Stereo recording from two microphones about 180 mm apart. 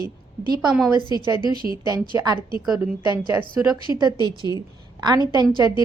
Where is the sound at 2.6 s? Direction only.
Centre (ahead or behind).